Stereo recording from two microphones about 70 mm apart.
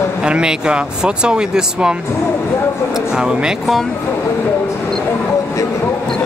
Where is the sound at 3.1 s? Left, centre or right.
Centre.